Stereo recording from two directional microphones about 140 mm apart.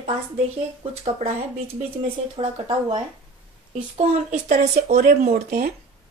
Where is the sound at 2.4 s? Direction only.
35° right (ahead or behind).